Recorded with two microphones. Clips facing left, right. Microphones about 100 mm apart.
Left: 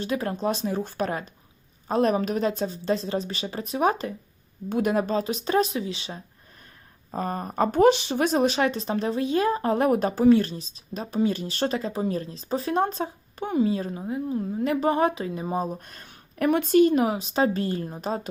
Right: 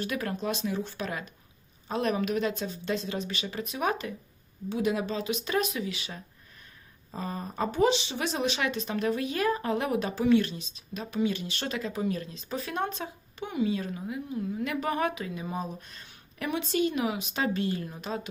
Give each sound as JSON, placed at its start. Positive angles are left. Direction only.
{"t": 0.0, "sound": "speech", "side_deg": 30}
{"t": 4.7, "sound": "speech", "side_deg": 50}
{"t": 7.1, "sound": "speech", "side_deg": 50}